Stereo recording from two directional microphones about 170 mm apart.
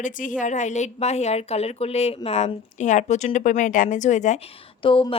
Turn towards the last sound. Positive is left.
turn(degrees=30)  # may be behind; listen again after turning